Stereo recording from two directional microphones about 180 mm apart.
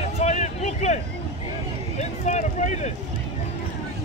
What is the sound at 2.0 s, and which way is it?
Vehicle, 40° left (ahead or behind).